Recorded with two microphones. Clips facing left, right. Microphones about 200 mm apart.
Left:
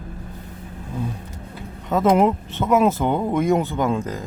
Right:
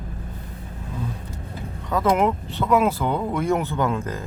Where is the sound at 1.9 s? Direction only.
20° left (ahead or behind).